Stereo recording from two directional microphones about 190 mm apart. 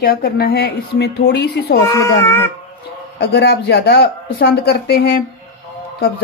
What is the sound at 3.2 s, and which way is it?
Speech, 60° left (ahead or behind).